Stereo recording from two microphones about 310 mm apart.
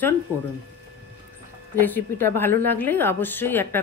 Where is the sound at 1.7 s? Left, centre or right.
Centre.